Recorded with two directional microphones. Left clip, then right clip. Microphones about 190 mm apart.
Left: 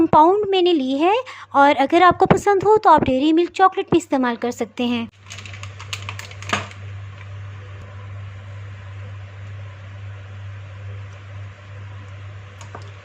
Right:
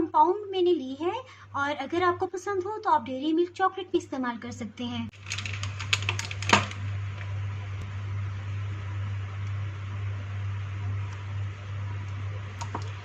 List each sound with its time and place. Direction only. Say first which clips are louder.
0.1 s a woman's voice: left 6 dB; 45° left (ahead or behind)